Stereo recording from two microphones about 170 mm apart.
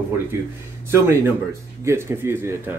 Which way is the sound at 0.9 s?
15° right (ahead or behind).